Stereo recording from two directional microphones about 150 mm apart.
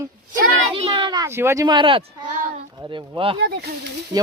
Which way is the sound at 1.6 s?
30° right (ahead or behind).